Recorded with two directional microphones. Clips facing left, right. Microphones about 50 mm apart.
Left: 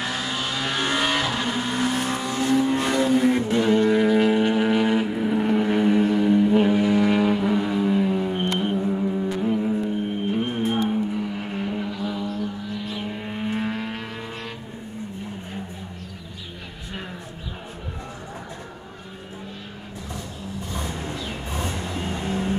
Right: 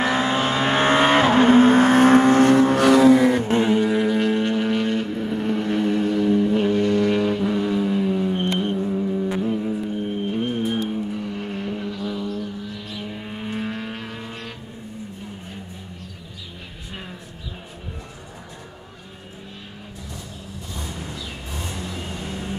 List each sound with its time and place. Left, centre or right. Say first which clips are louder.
0.0 s vehicle: right 7 dB; right
3.7 s vehicle: left 1 dB; centre
8.5 s music: even; centre
10.6 s vehicle: left 1 dB; centre
20.8 s vehicle: left 1 dB; left